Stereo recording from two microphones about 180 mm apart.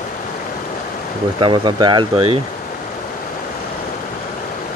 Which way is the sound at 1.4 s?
25° right (ahead or behind).